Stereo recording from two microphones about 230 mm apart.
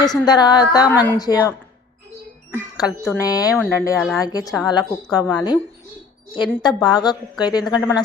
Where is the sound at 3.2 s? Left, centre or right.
Centre.